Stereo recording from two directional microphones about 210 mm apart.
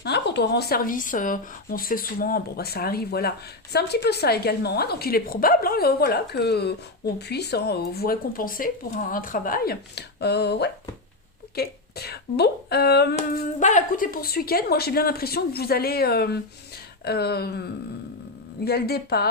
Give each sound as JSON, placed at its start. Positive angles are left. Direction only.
{"t": 0.0, "sound": "speech", "side_deg": 55}
{"t": 13.1, "sound": "speech", "side_deg": 35}
{"t": 18.6, "sound": "speech", "side_deg": 50}